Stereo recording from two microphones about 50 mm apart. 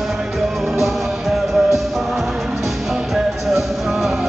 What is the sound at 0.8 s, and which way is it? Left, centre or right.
Music, centre.